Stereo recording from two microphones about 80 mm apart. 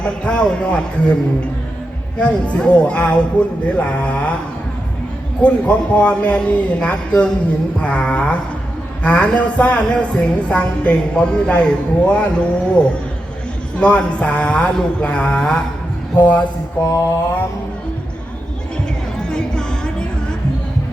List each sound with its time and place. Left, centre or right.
0.0 s speech: centre
5.4 s speech: centre
16.8 s mantra: left
19.3 s music: centre